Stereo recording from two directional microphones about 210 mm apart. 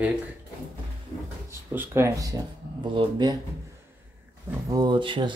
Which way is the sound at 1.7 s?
10° right (ahead or behind).